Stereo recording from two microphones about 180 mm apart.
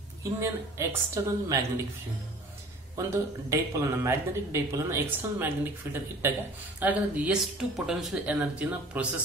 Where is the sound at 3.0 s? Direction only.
15° right (ahead or behind).